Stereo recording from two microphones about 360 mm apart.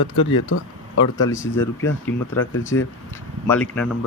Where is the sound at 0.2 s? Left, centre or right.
Left.